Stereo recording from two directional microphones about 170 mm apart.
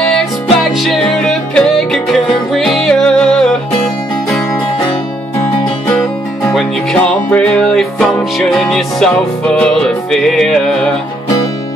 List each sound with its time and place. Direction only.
0.1 s music: centre (ahead or behind)
6.5 s music: 5° left (ahead or behind)